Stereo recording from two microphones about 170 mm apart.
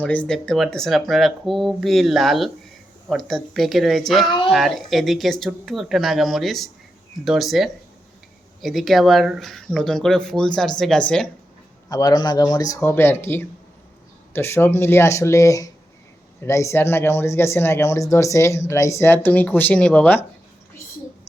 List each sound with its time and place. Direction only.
0.0 s speech: 10° left (ahead or behind)
11.9 s speech: 20° left (ahead or behind)